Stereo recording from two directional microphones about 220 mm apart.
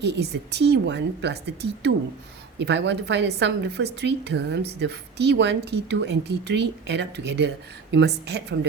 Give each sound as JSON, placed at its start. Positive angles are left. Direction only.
{"t": 0.0, "sound": "a woman's voice", "side_deg": -50}
{"t": 2.6, "sound": "a woman's voice", "side_deg": -50}